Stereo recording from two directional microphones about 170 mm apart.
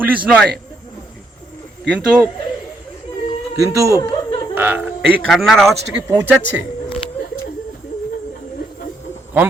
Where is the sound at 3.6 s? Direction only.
15° right (ahead or behind).